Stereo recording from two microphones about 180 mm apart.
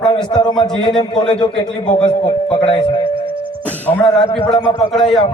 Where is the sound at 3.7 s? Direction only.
10° left (ahead or behind).